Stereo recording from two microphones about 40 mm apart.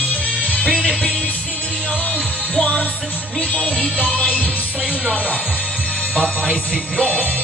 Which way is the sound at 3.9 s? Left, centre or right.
Left.